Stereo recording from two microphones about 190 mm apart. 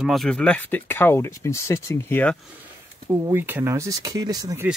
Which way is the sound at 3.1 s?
10° right (ahead or behind).